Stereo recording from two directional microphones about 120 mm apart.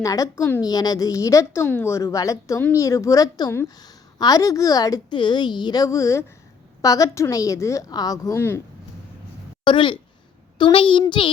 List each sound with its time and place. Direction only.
0.0 s a woman's voice: 30° left (ahead or behind)
0.6 s a woman's voice: 35° left (ahead or behind)
9.6 s a child's voice: 45° left (ahead or behind)